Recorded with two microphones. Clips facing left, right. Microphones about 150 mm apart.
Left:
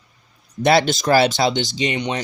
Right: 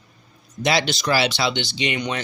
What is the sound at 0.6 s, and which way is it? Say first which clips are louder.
Speech: left 6 dB; 55° left (ahead or behind).